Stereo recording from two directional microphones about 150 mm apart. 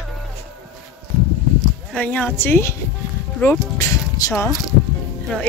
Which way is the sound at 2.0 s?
10° left (ahead or behind).